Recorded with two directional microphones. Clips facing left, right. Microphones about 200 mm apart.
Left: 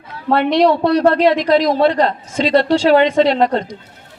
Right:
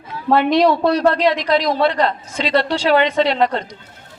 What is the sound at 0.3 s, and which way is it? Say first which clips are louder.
A man's voice: left 1 dB; 65° left (ahead or behind).